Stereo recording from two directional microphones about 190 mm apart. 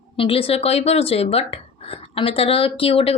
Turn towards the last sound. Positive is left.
turn(degrees=30)  # may be behind; listen again after turning